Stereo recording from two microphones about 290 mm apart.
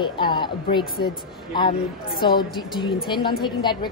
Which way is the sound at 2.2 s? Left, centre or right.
Centre.